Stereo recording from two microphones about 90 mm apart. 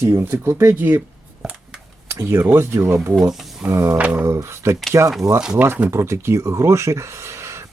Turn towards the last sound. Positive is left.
turn(degrees=-30)  # may be behind; listen again after turning